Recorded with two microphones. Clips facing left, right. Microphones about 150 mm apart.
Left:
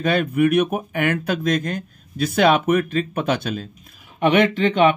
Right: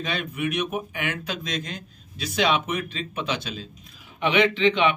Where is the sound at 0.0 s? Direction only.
55° left (ahead or behind).